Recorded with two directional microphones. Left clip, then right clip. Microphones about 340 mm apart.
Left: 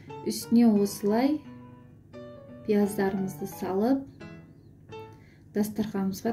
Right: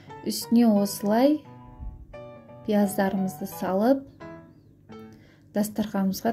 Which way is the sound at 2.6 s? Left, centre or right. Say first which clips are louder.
Right 2 dB; right.